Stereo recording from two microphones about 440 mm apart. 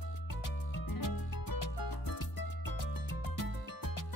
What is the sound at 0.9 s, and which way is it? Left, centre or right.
Music, left.